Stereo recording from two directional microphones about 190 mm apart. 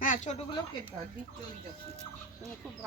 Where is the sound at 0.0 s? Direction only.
40° left (ahead or behind).